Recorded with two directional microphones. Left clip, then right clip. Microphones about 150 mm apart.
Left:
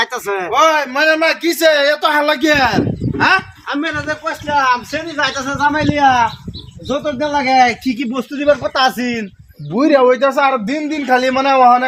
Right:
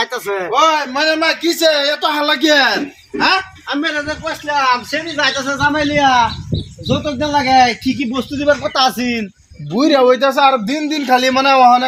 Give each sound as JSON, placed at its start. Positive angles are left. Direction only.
{"t": 0.0, "sound": "a man's voice", "side_deg": 5}
{"t": 9.7, "sound": "a man's voice", "side_deg": 15}